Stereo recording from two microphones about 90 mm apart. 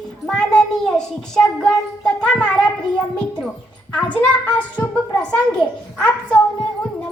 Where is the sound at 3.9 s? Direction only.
15° left (ahead or behind).